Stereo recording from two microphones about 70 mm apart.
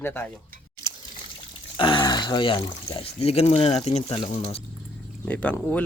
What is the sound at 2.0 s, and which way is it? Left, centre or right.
Speech, left.